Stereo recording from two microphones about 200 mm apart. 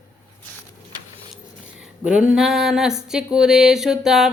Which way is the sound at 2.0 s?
5° right (ahead or behind).